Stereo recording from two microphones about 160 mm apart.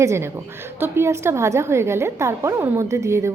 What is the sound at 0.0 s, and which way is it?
A woman's voice, 15° right (ahead or behind).